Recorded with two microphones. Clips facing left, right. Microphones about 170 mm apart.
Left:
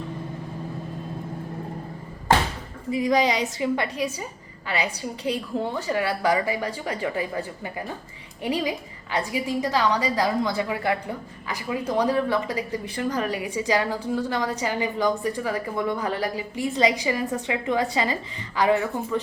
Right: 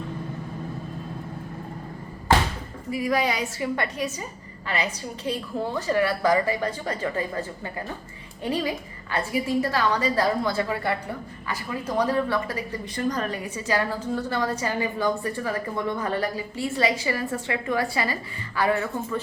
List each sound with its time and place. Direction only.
2.9 s a woman's voice: 20° left (ahead or behind)